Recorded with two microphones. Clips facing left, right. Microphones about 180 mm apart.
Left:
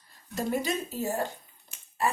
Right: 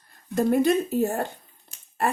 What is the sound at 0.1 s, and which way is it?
Speech, 55° right (ahead or behind).